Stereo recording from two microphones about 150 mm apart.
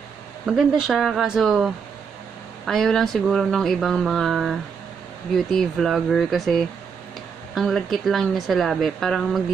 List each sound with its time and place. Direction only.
0.5 s speech: centre (ahead or behind)